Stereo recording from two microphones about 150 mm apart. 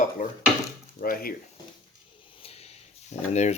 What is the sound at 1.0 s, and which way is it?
Speech, 75° left (ahead or behind).